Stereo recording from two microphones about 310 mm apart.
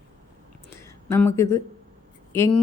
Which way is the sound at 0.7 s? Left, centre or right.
Centre.